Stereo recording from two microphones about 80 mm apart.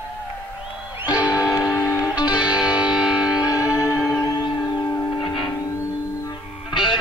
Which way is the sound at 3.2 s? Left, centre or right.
Left.